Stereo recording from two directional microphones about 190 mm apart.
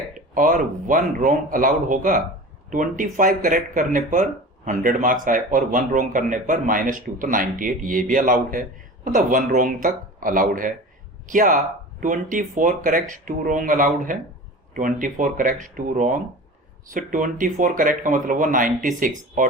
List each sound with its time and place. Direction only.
0.3 s speech: 45° right (ahead or behind)